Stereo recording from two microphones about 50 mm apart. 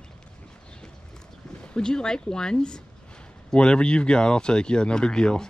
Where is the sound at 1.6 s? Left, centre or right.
Centre.